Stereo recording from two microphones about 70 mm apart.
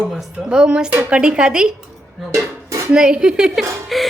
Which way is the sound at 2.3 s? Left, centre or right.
Right.